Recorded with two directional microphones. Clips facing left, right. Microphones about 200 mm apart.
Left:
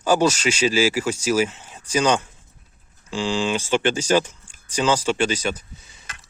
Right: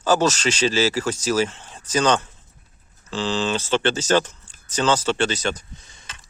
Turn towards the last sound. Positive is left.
turn(degrees=10)  # may be behind; listen again after turning